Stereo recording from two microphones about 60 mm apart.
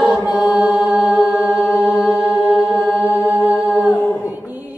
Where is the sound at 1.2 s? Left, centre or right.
Centre.